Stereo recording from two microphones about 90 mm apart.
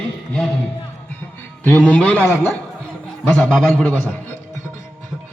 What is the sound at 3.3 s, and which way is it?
A man's voice, 10° left (ahead or behind).